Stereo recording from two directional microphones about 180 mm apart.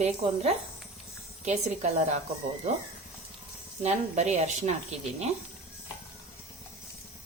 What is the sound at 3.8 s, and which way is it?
Speech, 40° right (ahead or behind).